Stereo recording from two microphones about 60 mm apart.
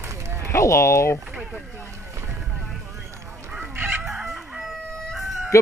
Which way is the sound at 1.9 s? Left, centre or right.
Right.